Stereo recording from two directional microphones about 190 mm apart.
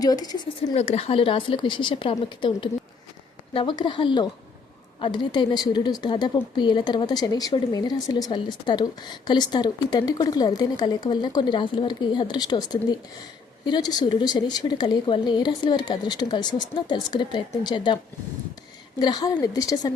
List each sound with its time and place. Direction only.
0.0 s a woman's voice: 20° left (ahead or behind)
0.7 s a woman's voice: 35° left (ahead or behind)